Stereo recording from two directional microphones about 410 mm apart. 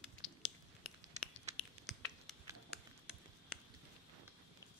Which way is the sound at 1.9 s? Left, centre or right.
Centre.